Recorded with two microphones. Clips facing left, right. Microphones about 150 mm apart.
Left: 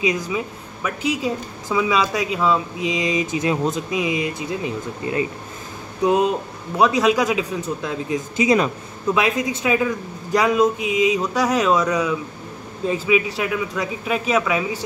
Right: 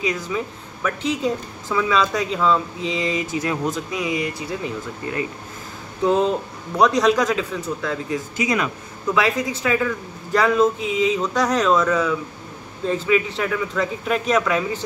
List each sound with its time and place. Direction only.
0.0 s speech: 15° left (ahead or behind)
6.8 s speech: 5° left (ahead or behind)